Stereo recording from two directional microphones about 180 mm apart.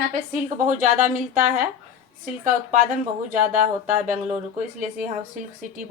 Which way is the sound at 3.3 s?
45° right (ahead or behind).